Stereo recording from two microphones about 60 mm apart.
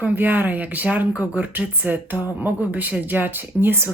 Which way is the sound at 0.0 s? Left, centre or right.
Right.